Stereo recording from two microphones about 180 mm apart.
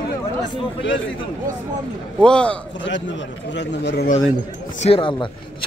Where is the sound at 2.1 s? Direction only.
5° left (ahead or behind).